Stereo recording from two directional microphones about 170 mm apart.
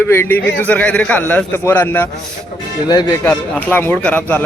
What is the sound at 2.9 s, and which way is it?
Speech, 25° left (ahead or behind).